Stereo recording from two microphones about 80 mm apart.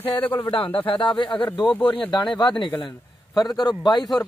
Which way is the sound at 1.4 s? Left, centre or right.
Left.